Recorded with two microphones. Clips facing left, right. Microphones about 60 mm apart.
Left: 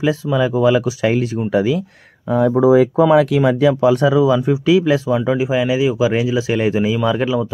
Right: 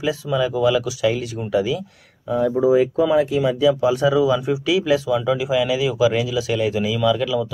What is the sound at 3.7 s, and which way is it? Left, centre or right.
Speech, left.